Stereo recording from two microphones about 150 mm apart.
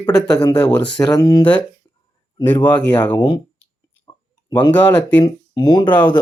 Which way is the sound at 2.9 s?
30° left (ahead or behind).